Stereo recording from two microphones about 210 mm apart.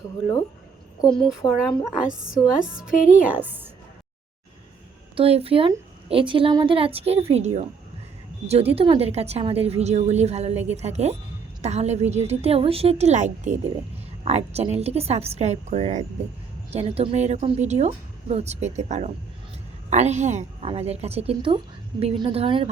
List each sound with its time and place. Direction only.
1.1 s speech: centre (ahead or behind)
5.1 s a woman's voice: 25° right (ahead or behind)